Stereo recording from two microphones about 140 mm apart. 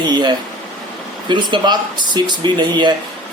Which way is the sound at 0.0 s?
30° right (ahead or behind).